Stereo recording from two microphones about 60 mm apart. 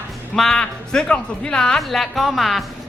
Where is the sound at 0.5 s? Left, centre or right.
Centre.